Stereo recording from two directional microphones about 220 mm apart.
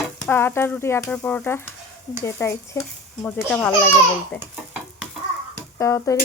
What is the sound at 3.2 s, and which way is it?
Speech, 5° left (ahead or behind).